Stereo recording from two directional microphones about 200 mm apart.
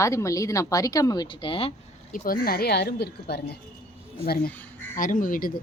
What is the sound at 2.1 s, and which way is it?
Speech, 45° left (ahead or behind).